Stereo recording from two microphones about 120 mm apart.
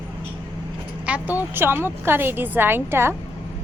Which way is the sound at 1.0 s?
10° right (ahead or behind).